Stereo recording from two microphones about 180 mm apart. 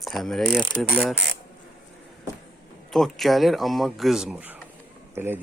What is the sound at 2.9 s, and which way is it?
Speech, centre (ahead or behind).